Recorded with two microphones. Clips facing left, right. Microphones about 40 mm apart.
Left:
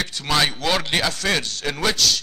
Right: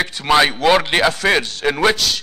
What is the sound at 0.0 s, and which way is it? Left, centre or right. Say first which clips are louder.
Speech: right 7 dB; centre.